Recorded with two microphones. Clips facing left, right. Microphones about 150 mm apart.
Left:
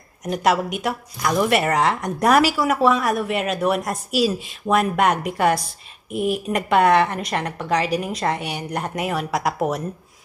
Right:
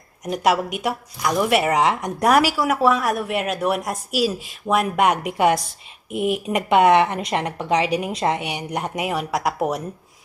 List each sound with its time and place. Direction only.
0.3 s a woman's voice: 10° right (ahead or behind)